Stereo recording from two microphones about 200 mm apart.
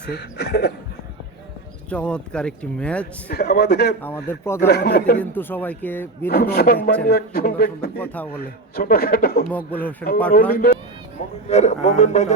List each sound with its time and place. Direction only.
0.0 s speech: 55° left (ahead or behind)
1.9 s speech: 5° left (ahead or behind)
3.2 s speech: 50° left (ahead or behind)
4.0 s speech: 10° left (ahead or behind)
4.6 s speech: 55° left (ahead or behind)
5.2 s speech: 10° left (ahead or behind)
6.2 s speech: 50° left (ahead or behind)
7.9 s speech: 10° left (ahead or behind)
8.3 s speech: 50° left (ahead or behind)
9.5 s speech: 10° left (ahead or behind)
10.5 s speech: 50° left (ahead or behind)
11.4 s speech: 35° left (ahead or behind)